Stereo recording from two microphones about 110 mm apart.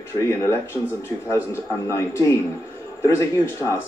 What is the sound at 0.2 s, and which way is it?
Speech, 25° left (ahead or behind).